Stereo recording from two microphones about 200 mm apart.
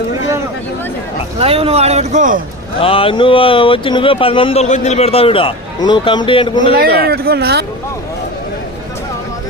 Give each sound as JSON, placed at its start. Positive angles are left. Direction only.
{"t": 1.4, "sound": "speech", "side_deg": -30}
{"t": 2.8, "sound": "speech", "side_deg": 25}
{"t": 7.0, "sound": "speech", "side_deg": -50}